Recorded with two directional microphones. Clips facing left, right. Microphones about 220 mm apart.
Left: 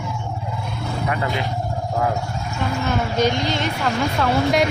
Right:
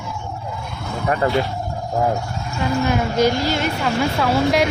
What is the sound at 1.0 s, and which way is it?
Speech, 40° right (ahead or behind).